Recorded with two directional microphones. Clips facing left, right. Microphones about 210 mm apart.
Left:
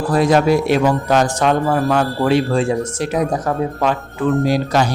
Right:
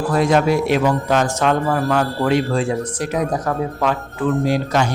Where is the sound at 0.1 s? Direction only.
35° left (ahead or behind).